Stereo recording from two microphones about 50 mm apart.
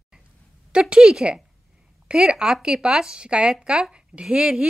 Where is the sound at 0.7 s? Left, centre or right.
Centre.